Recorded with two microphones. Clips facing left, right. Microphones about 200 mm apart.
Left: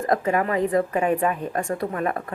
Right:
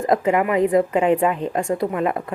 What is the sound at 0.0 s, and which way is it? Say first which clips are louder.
A woman's voice: right 4 dB; 20° right (ahead or behind).